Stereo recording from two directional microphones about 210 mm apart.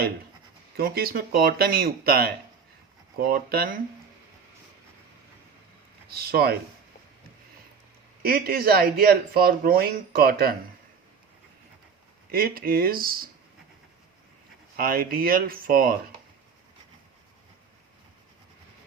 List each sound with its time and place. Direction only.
0.8 s speech: 45° right (ahead or behind)
6.1 s speech: 45° right (ahead or behind)
8.2 s speech: 45° right (ahead or behind)
12.3 s speech: 45° right (ahead or behind)
14.8 s speech: 45° right (ahead or behind)